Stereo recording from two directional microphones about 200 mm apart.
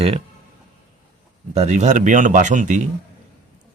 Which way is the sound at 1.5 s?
35° right (ahead or behind).